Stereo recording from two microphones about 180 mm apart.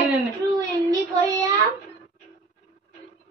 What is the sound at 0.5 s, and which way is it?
Speech, 20° right (ahead or behind).